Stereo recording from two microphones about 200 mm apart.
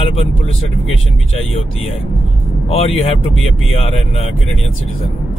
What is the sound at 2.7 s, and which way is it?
Speech, 30° left (ahead or behind).